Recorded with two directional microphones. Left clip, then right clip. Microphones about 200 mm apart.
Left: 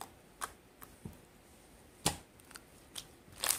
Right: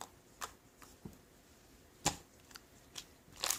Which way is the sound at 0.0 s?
10° right (ahead or behind).